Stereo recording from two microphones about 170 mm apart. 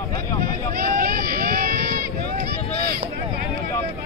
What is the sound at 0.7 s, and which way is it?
Run, 60° right (ahead or behind).